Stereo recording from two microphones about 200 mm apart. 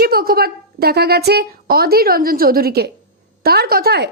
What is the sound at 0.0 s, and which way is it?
Speech, 50° right (ahead or behind).